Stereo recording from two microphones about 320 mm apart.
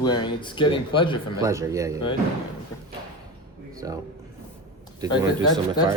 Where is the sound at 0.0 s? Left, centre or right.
Centre.